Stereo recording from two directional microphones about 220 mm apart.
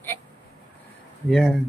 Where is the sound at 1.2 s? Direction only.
Centre (ahead or behind).